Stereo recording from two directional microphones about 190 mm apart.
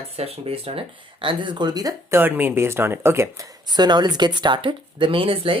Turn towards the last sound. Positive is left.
turn(degrees=-30)  # may be behind; listen again after turning